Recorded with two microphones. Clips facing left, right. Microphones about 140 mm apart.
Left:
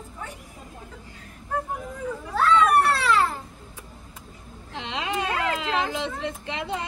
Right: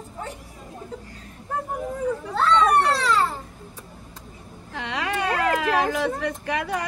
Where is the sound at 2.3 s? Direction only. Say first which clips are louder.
Even; 5° left (ahead or behind).